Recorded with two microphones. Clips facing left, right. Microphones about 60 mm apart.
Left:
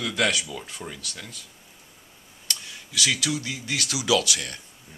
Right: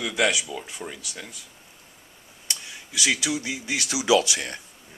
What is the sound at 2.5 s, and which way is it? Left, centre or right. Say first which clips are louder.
Speech: left 1 dB; centre.